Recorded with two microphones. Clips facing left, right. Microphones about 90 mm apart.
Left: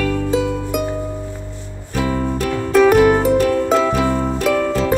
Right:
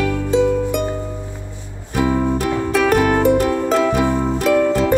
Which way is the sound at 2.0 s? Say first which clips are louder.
Right 2 dB; 20° right (ahead or behind).